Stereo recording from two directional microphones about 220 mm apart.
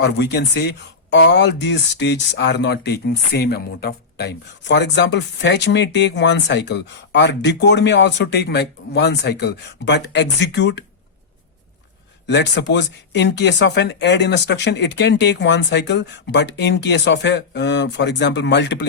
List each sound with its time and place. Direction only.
0.0 s speech: 50° left (ahead or behind)
12.3 s speech: 50° left (ahead or behind)